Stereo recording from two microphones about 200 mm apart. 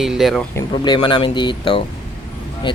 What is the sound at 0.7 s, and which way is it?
Speech, 25° left (ahead or behind).